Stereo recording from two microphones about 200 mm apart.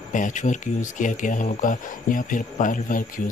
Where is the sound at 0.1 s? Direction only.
40° left (ahead or behind).